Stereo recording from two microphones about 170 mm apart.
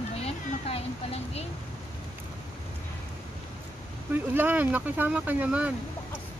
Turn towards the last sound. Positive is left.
turn(degrees=-10)  # may be behind; listen again after turning